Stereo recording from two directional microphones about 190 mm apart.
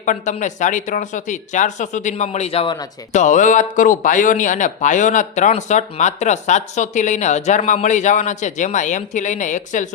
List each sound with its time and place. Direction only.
0.0 s speech: 40° left (ahead or behind)